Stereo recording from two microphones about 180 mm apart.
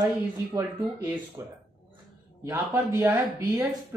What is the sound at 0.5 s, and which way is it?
Speech, 20° right (ahead or behind).